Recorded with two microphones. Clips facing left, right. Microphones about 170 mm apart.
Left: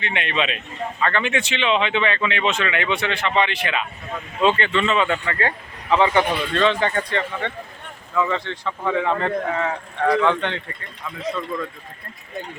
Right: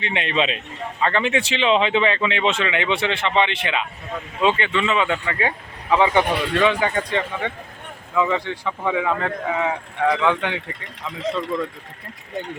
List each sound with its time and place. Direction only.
0.0 s speech: 30° right (ahead or behind)
4.4 s speech: 15° right (ahead or behind)